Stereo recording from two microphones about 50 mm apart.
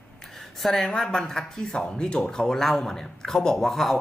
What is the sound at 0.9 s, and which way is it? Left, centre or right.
A woman's voice, centre.